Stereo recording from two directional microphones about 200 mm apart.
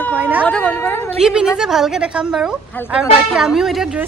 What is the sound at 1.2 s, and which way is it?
A woman's voice, 5° right (ahead or behind).